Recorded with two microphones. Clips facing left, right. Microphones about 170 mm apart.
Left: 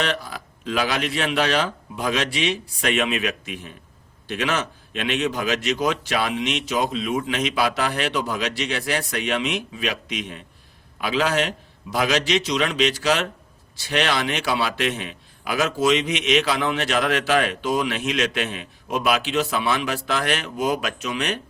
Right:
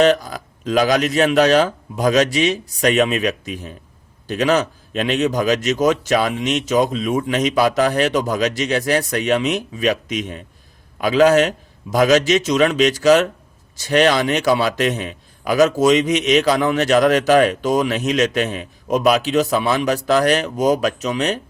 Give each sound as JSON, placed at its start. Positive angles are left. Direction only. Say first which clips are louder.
{"t": 0.0, "sound": "a man's voice", "louder": "right 11 dB", "side_deg": -45}